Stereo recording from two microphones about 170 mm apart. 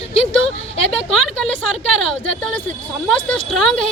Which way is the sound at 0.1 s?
35° left (ahead or behind).